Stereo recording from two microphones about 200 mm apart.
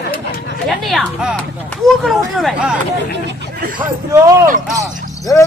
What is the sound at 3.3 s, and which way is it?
Speech, 45° right (ahead or behind).